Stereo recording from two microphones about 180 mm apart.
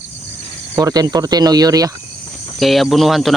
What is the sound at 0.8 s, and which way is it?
Speech, 20° right (ahead or behind).